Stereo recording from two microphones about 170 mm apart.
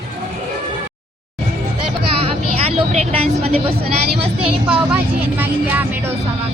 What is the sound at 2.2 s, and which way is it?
Vehicle, 35° right (ahead or behind).